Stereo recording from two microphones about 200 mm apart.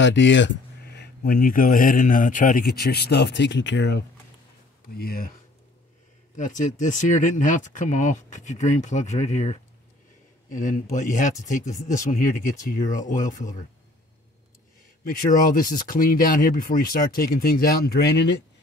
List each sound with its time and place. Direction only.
0.0 s speech: 65° left (ahead or behind)
4.9 s speech: 50° left (ahead or behind)
6.3 s speech: 40° left (ahead or behind)
15.1 s speech: 45° left (ahead or behind)